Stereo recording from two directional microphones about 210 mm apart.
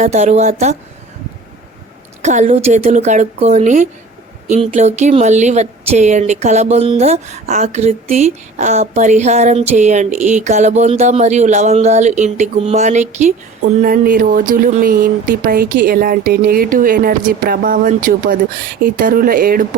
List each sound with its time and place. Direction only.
0.0 s speech: 35° right (ahead or behind)
2.2 s speech: 35° right (ahead or behind)